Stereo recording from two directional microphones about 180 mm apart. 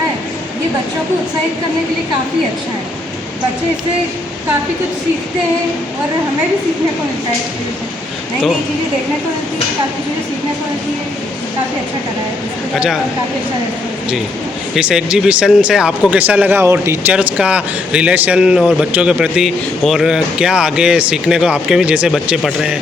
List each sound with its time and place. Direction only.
14.8 s speech: 5° right (ahead or behind)